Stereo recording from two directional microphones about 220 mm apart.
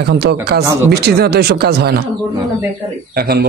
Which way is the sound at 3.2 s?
45° right (ahead or behind).